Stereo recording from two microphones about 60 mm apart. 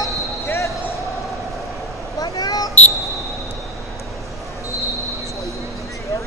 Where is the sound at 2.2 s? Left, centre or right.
Left.